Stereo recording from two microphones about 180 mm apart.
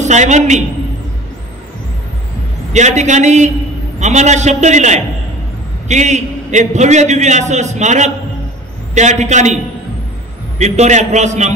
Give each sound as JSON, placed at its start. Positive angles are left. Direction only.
{"t": 0.0, "sound": "a man's voice", "side_deg": -40}
{"t": 2.7, "sound": "a man's voice", "side_deg": -40}
{"t": 10.6, "sound": "a man's voice", "side_deg": -40}